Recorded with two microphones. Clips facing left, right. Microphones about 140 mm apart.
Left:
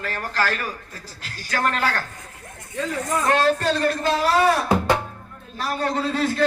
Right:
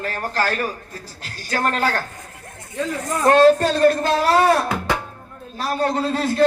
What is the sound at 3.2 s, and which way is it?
A man's voice, 40° right (ahead or behind).